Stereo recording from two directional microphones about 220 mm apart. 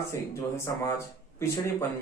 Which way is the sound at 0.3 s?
15° left (ahead or behind).